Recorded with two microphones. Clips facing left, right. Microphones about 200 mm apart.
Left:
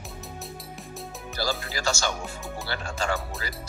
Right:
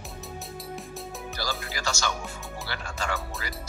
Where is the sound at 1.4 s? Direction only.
30° left (ahead or behind).